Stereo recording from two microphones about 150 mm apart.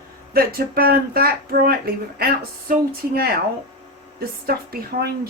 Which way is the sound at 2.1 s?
90° right.